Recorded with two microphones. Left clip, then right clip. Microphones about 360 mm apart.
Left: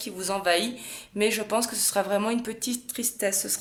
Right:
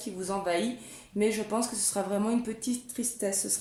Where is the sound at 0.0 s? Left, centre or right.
Left.